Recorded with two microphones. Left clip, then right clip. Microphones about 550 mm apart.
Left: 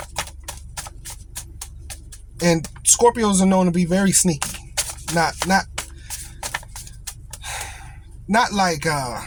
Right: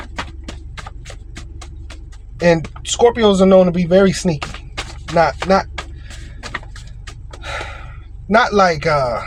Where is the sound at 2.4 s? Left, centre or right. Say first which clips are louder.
Right 6 dB; left.